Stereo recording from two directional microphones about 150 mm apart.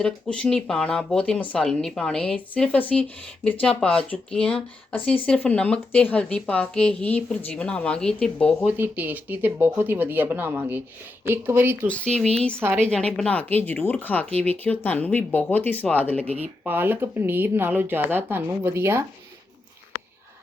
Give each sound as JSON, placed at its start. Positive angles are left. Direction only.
{"t": 0.0, "sound": "speech", "side_deg": 5}
{"t": 8.6, "sound": "speech", "side_deg": -10}
{"t": 11.9, "sound": "speech", "side_deg": 5}
{"t": 12.5, "sound": "speech", "side_deg": -15}
{"t": 12.8, "sound": "speech", "side_deg": 5}
{"t": 16.2, "sound": "speech", "side_deg": -45}
{"t": 16.6, "sound": "speech", "side_deg": -15}